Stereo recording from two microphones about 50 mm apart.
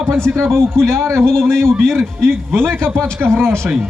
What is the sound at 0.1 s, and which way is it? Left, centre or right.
A man's voice, right.